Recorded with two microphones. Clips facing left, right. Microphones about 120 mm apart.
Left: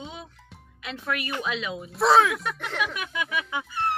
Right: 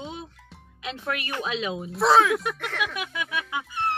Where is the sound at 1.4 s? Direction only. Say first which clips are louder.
Right 2 dB; 25° right (ahead or behind).